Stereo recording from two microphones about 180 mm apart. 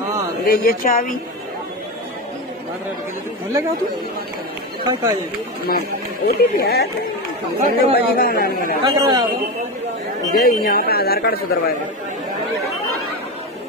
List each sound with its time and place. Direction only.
0.5 s speech: 55° left (ahead or behind)
4.9 s speech: 20° right (ahead or behind)
5.7 s a man's voice: 60° left (ahead or behind)
8.8 s speech: 25° right (ahead or behind)
10.3 s a man's voice: 55° left (ahead or behind)